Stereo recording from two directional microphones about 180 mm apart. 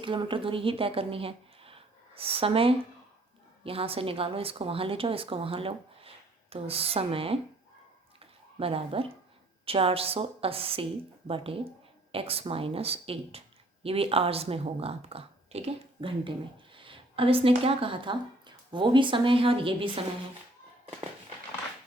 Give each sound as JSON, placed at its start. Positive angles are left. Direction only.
{"t": 0.0, "sound": "a woman's voice", "side_deg": -25}
{"t": 8.2, "sound": "a sound", "side_deg": -30}
{"t": 9.6, "sound": "a woman's voice", "side_deg": -30}